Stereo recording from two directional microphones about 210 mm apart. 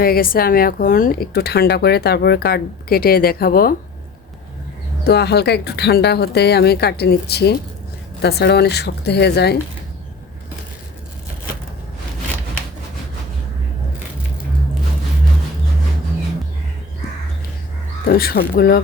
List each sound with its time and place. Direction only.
0.0 s speech: 45° left (ahead or behind)
5.0 s speech: 50° left (ahead or behind)
18.1 s speech: 45° left (ahead or behind)